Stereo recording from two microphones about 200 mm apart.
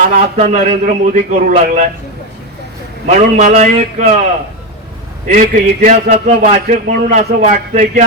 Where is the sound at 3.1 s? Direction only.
40° right (ahead or behind).